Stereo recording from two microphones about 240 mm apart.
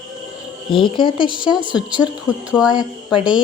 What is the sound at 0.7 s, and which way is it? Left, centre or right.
Speech, left.